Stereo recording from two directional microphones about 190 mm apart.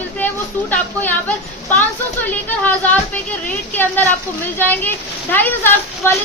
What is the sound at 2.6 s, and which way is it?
Speech, 10° left (ahead or behind).